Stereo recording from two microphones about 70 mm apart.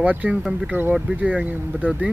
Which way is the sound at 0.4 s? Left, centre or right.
Centre.